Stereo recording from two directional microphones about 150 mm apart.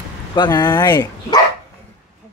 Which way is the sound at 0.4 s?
25° left (ahead or behind).